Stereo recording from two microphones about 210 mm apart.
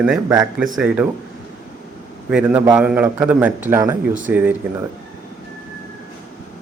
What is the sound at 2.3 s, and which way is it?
A man's voice, 5° right (ahead or behind).